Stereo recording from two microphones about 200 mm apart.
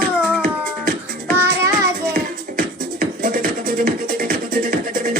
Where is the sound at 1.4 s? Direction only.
15° right (ahead or behind).